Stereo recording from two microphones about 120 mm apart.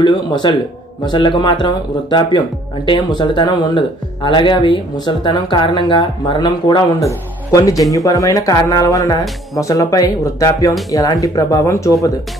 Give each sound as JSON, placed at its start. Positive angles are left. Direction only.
{"t": 0.0, "sound": "speech", "side_deg": 40}
{"t": 7.0, "sound": "speech", "side_deg": 25}